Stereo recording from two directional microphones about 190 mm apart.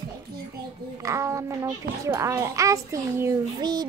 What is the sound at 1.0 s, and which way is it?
A child's voice, 15° right (ahead or behind).